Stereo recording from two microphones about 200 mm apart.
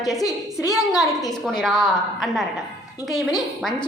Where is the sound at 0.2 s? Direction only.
15° left (ahead or behind).